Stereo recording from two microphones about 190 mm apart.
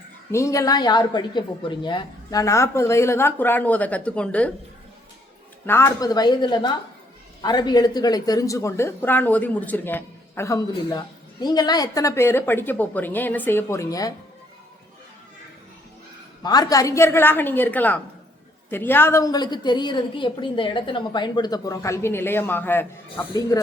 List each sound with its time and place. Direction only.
0.3 s speech: 15° left (ahead or behind)
5.6 s a woman's voice: 15° left (ahead or behind)
16.4 s a woman's voice: 20° left (ahead or behind)